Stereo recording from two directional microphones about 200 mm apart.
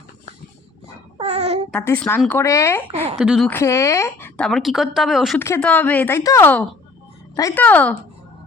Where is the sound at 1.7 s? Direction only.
5° left (ahead or behind).